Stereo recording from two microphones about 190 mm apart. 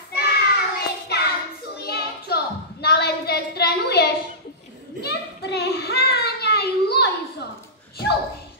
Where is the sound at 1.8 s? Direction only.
55° left (ahead or behind).